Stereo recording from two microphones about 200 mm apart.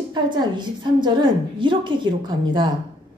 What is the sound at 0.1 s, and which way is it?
A woman's voice, 20° right (ahead or behind).